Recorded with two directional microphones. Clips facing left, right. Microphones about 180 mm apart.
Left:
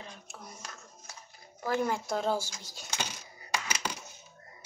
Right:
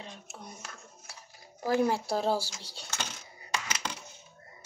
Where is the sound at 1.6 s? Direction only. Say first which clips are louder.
Right 3 dB; 40° right (ahead or behind).